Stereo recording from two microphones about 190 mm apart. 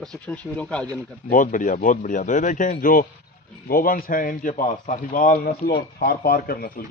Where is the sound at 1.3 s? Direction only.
45° left (ahead or behind).